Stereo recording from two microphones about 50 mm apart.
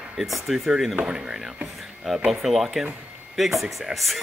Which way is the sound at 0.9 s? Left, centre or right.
Centre.